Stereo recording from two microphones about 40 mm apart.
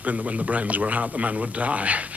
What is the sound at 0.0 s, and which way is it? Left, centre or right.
A man's voice, right.